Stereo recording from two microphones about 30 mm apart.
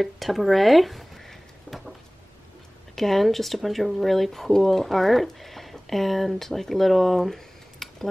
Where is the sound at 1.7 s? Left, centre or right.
Left.